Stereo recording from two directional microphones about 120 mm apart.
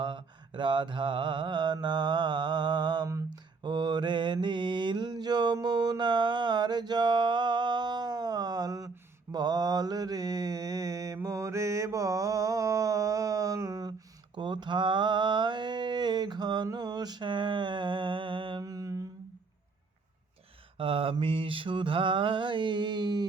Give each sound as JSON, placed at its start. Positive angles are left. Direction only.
{"t": 0.0, "sound": "mantra", "side_deg": -40}
{"t": 3.1, "sound": "a sound", "side_deg": -25}
{"t": 3.6, "sound": "mantra", "side_deg": -40}
{"t": 14.3, "sound": "mantra", "side_deg": -40}
{"t": 18.6, "sound": "mantra", "side_deg": -30}
{"t": 20.7, "sound": "mantra", "side_deg": -50}